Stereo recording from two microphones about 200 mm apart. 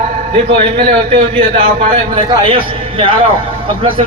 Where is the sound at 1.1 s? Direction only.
30° right (ahead or behind).